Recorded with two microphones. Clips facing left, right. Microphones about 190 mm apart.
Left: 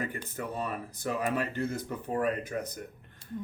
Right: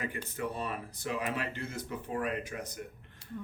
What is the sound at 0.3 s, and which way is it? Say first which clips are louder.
Speech: left 2 dB; 45° left (ahead or behind).